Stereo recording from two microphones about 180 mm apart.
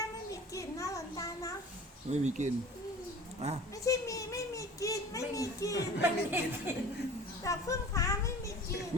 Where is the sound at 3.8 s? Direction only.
20° left (ahead or behind).